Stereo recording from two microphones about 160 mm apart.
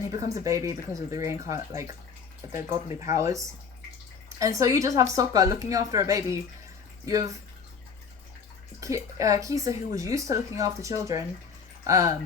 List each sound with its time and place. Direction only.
0.3 s speech: 20° right (ahead or behind)
8.8 s speech: 20° right (ahead or behind)